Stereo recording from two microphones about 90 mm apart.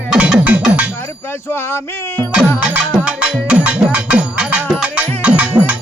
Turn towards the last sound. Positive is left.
turn(degrees=-15)  # may be behind; listen again after turning